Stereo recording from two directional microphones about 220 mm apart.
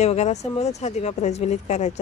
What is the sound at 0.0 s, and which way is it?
Speech, 30° left (ahead or behind).